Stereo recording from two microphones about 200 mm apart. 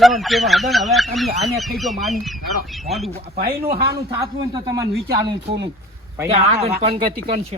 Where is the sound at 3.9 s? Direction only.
20° right (ahead or behind).